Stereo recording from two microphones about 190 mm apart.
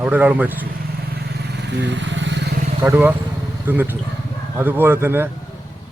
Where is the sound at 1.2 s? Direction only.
60° right (ahead or behind).